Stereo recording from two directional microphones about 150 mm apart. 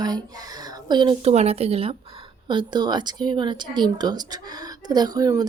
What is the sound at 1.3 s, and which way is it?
A woman's voice, 45° right (ahead or behind).